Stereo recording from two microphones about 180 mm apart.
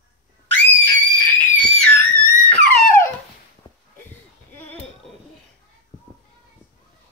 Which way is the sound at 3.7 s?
30° left (ahead or behind).